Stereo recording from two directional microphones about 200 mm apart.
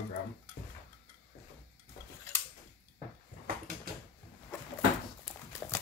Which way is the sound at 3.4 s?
50° right (ahead or behind).